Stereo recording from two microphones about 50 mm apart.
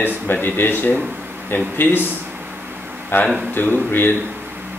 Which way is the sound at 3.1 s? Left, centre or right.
Left.